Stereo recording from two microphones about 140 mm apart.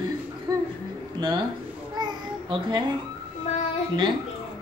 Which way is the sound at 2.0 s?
30° right (ahead or behind).